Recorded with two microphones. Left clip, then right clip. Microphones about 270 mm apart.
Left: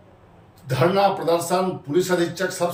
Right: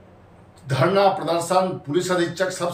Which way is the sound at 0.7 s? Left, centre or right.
Centre.